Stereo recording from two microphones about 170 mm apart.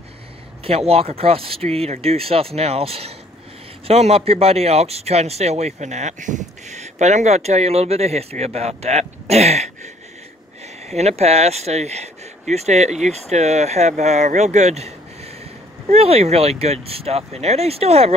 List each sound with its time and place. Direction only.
0.7 s speech: 35° right (ahead or behind)
10.9 s speech: 40° right (ahead or behind)